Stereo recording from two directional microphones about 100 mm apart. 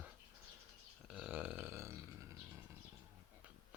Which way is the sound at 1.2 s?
15° right (ahead or behind).